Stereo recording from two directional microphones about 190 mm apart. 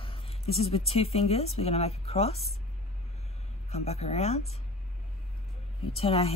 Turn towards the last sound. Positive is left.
turn(degrees=30)  # may be behind; listen again after turning